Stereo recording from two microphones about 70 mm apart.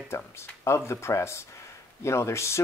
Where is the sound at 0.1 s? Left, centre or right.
Left.